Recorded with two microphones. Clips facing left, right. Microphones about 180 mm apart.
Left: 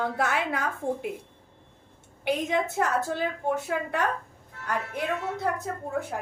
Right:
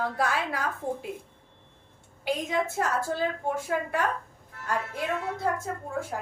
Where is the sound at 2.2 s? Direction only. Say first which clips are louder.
Left 2 dB; 20° left (ahead or behind).